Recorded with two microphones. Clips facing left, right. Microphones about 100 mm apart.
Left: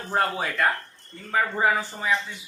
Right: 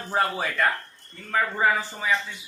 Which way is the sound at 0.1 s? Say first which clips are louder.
Even; centre (ahead or behind).